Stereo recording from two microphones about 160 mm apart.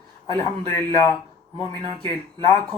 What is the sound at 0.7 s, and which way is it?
Speech, 20° left (ahead or behind).